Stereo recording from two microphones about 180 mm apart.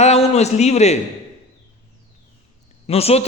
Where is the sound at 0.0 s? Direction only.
35° left (ahead or behind).